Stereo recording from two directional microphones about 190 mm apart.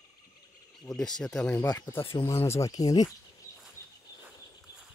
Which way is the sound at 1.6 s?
15° left (ahead or behind).